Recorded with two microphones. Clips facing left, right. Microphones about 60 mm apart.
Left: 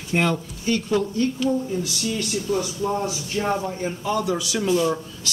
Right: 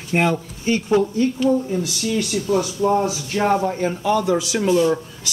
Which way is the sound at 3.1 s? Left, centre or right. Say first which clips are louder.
Right 5 dB; right.